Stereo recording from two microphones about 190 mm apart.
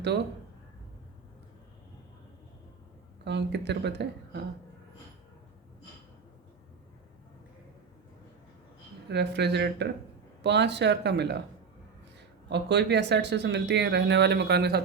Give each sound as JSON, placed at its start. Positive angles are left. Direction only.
{"t": 3.2, "sound": "speech", "side_deg": -65}
{"t": 9.0, "sound": "speech", "side_deg": -65}
{"t": 12.5, "sound": "speech", "side_deg": -65}